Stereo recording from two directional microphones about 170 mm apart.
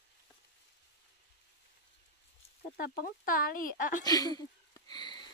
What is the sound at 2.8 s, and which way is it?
Speech, 60° left (ahead or behind).